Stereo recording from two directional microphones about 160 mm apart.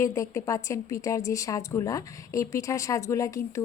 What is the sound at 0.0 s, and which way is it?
A woman's voice, 20° left (ahead or behind).